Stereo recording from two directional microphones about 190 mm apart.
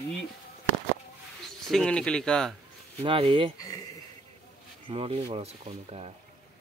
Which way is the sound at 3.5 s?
20° left (ahead or behind).